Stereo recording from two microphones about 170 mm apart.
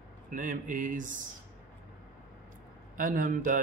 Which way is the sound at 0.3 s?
50° right (ahead or behind).